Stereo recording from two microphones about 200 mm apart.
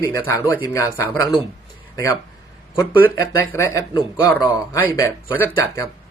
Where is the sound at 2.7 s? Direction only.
15° left (ahead or behind).